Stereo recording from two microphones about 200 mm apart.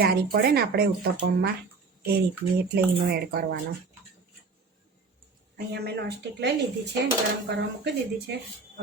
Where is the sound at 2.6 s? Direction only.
55° right (ahead or behind).